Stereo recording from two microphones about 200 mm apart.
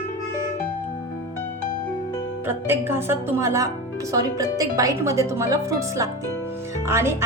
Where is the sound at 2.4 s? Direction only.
10° right (ahead or behind).